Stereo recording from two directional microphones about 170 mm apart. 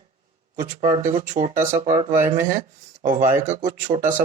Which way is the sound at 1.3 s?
50° right (ahead or behind).